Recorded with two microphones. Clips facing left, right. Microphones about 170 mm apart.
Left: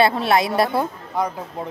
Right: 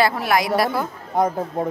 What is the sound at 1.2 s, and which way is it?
Speech, 50° right (ahead or behind).